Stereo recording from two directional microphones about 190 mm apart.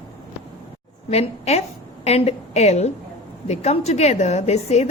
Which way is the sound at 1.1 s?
35° left (ahead or behind).